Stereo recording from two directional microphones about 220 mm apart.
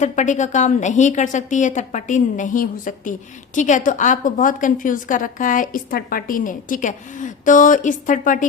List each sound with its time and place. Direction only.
0.0 s a woman's voice: 35° left (ahead or behind)